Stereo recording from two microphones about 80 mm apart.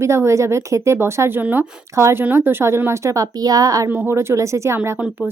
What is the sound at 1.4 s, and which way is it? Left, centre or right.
Speech, right.